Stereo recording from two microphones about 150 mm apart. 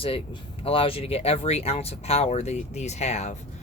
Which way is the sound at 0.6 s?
40° left (ahead or behind).